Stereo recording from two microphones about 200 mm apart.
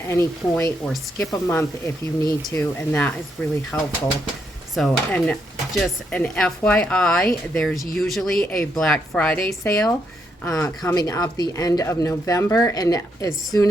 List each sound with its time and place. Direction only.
0.1 s speech: 15° left (ahead or behind)
4.7 s speech: centre (ahead or behind)
10.4 s speech: 15° left (ahead or behind)